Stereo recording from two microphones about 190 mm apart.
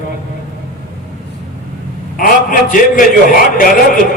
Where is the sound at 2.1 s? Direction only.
50° left (ahead or behind).